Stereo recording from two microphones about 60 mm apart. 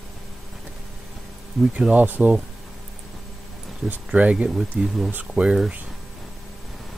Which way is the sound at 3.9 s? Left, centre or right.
Right.